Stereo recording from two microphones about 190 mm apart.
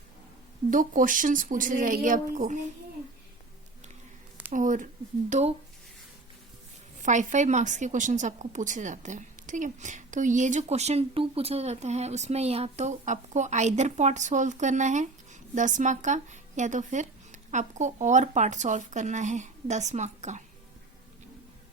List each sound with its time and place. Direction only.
0.7 s speech: 45° right (ahead or behind)
4.5 s a woman's voice: 40° right (ahead or behind)
7.0 s a woman's voice: 40° right (ahead or behind)